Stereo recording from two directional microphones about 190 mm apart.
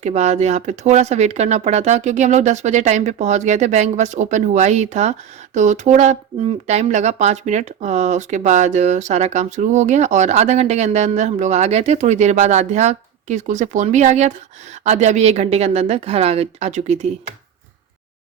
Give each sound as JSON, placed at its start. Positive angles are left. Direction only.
{"t": 0.0, "sound": "speech", "side_deg": -35}